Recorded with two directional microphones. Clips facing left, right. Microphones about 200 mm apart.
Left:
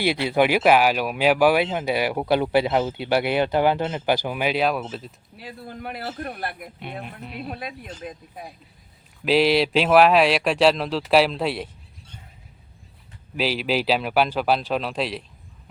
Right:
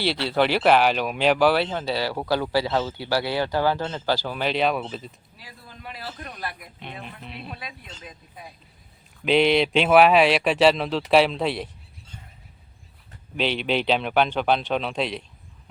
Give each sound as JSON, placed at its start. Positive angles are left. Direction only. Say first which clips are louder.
{"t": 0.0, "sound": "speech", "louder": "left 2 dB", "side_deg": 15}
{"t": 5.4, "sound": "a man's voice", "louder": "left 9 dB", "side_deg": 60}
{"t": 7.2, "sound": "a man's voice", "louder": "left 4 dB", "side_deg": 5}
{"t": 7.4, "sound": "speech", "louder": "left 6 dB", "side_deg": 50}
{"t": 9.2, "sound": "a man's voice", "louder": "even", "side_deg": 5}
{"t": 13.3, "sound": "a man's voice", "louder": "left 1 dB", "side_deg": 5}